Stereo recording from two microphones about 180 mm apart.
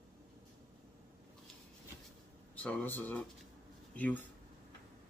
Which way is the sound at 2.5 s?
10° left (ahead or behind).